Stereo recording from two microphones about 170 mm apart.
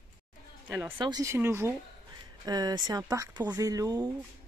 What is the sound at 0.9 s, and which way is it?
Speech, 25° right (ahead or behind).